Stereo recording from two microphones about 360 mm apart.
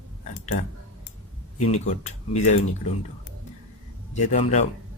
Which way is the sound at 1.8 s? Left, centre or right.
Centre.